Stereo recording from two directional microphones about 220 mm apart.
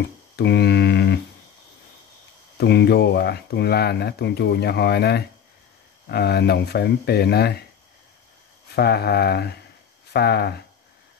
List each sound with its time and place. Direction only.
0.4 s a sound: 50° left (ahead or behind)
2.5 s speech: 50° left (ahead or behind)
8.7 s speech: 45° left (ahead or behind)